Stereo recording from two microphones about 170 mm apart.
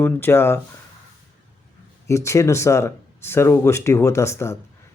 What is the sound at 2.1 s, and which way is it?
Speech, 15° left (ahead or behind).